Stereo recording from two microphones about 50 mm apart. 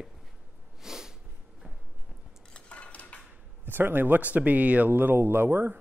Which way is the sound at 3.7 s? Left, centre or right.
Right.